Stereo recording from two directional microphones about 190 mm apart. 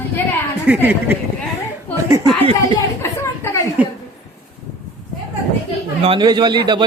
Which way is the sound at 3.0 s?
15° left (ahead or behind).